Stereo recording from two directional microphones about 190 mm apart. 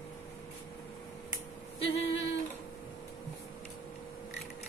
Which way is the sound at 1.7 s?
30° left (ahead or behind).